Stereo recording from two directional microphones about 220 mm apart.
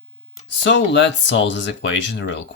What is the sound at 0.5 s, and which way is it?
Speech, 55° left (ahead or behind).